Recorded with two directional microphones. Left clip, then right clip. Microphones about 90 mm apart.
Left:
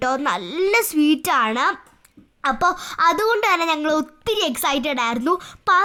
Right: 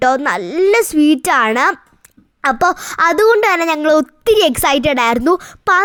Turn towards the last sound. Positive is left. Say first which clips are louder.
# right 4 dB
turn(degrees=-45)  # may be behind; listen again after turning